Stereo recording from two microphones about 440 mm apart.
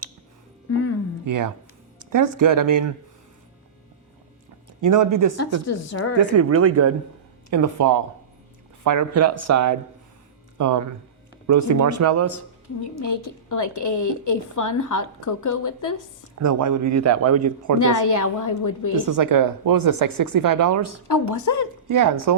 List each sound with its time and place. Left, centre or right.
1.2 s speech: right
4.8 s speech: right
5.6 s a woman's voice: left
6.1 s speech: right
12.6 s a woman's voice: left
16.4 s speech: right
17.7 s a woman's voice: left
18.9 s speech: right
21.3 s a woman's voice: left
21.8 s speech: right